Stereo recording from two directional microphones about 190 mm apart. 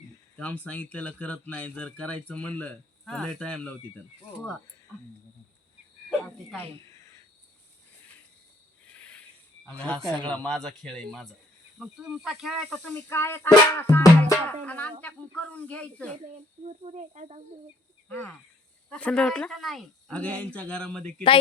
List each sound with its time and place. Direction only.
0.3 s speech: 5° left (ahead or behind)
6.1 s cricket: 5° left (ahead or behind)
6.9 s cricket: 15° left (ahead or behind)
8.9 s cricket: 5° left (ahead or behind)
9.6 s speech: 5° left (ahead or behind)
16.6 s cricket: 35° right (ahead or behind)
18.1 s speech: 10° left (ahead or behind)